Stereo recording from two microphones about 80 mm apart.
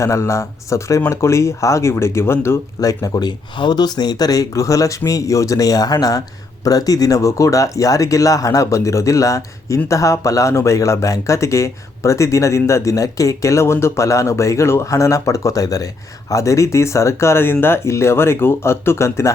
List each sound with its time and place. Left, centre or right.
0.0 s speech: left
2.8 s speech: left